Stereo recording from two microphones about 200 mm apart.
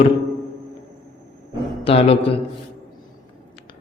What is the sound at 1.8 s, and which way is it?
Speech, 30° left (ahead or behind).